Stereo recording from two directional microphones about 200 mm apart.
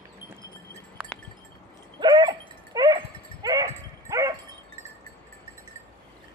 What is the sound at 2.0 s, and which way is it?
Dog, 20° right (ahead or behind).